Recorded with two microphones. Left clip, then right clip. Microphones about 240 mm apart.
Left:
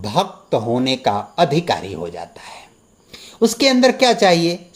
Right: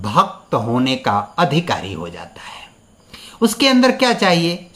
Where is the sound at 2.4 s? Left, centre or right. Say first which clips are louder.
Right 3 dB; right.